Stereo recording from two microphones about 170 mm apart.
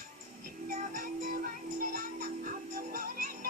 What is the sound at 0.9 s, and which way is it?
Music, 60° right (ahead or behind).